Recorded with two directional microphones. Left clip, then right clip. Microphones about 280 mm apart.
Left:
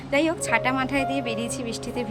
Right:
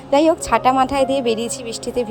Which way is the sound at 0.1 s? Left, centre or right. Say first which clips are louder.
Right 8 dB; centre.